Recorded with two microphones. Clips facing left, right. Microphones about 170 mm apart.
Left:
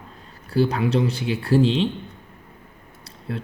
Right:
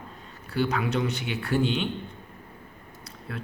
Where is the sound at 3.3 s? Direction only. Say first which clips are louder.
Left 6 dB; 30° left (ahead or behind).